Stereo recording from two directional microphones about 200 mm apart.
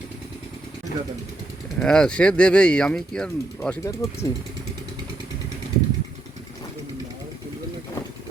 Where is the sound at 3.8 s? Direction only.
15° left (ahead or behind).